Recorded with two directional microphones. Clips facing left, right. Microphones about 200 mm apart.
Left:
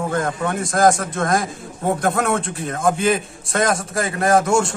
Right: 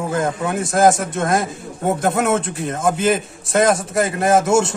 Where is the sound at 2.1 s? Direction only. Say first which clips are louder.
Right 2 dB; centre (ahead or behind).